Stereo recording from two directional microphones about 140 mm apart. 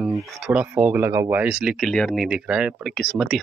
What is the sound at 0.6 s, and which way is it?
Speech, 15° right (ahead or behind).